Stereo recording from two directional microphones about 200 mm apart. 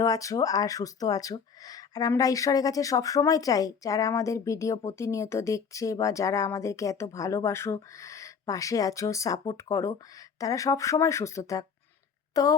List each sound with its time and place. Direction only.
0.0 s speech: 15° left (ahead or behind)